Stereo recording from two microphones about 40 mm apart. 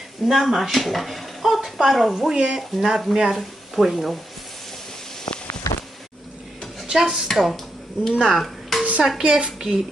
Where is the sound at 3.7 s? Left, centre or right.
Centre.